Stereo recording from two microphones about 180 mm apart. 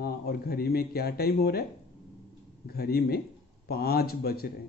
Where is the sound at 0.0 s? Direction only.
60° left (ahead or behind).